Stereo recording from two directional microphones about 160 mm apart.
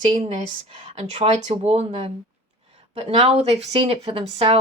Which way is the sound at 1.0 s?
45° right (ahead or behind).